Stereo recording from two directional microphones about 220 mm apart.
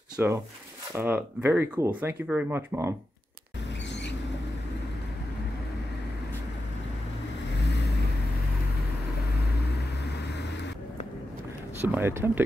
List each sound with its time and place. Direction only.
0.2 s speech: 10° right (ahead or behind)
3.9 s vehicle: 50° left (ahead or behind)
11.8 s speech: 10° right (ahead or behind)